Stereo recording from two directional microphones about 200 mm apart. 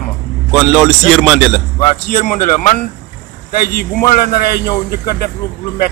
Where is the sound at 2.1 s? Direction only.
40° left (ahead or behind).